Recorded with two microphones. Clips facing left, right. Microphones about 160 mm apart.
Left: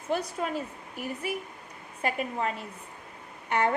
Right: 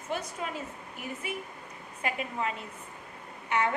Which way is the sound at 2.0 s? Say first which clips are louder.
Left 3 dB; 40° left (ahead or behind).